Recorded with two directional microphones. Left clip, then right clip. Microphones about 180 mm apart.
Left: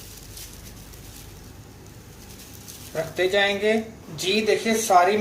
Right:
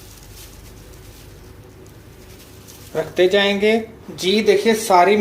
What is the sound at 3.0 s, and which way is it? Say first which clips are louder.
Speech: right 6 dB; 35° right (ahead or behind).